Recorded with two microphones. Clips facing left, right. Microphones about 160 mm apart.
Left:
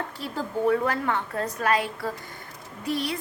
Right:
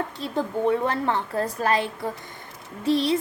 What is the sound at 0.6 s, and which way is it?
A woman's voice, 25° right (ahead or behind).